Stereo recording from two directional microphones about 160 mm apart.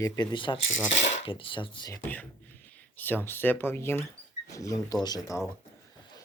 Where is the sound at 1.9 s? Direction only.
10° left (ahead or behind).